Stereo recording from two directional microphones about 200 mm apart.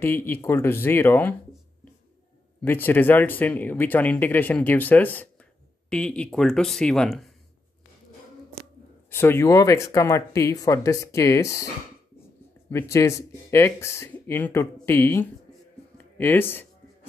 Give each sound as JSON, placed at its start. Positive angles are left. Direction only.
{"t": 0.0, "sound": "speech", "side_deg": 10}
{"t": 2.6, "sound": "speech", "side_deg": 10}
{"t": 9.1, "sound": "speech", "side_deg": 10}
{"t": 16.2, "sound": "a sound", "side_deg": 10}